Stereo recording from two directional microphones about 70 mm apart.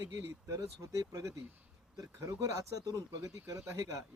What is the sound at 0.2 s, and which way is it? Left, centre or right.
Speech, right.